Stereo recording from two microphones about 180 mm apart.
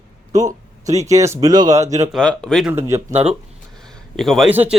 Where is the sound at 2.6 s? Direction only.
15° right (ahead or behind).